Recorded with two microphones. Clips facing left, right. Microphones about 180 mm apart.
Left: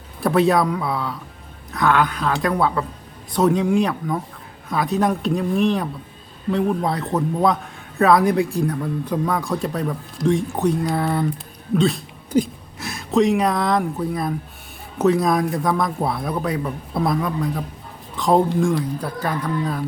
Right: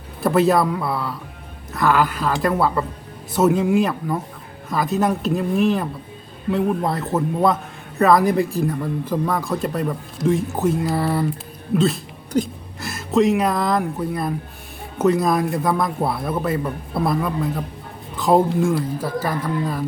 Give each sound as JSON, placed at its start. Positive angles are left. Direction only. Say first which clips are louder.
{"t": 0.2, "sound": "a man's voice", "louder": "even", "side_deg": 0}